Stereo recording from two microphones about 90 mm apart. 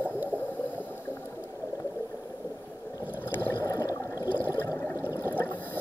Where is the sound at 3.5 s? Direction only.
35° left (ahead or behind).